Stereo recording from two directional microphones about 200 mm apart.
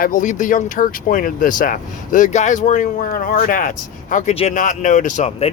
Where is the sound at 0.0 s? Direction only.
40° left (ahead or behind).